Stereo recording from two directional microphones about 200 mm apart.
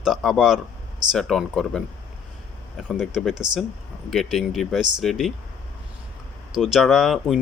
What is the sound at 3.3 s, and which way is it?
Speech, 20° right (ahead or behind).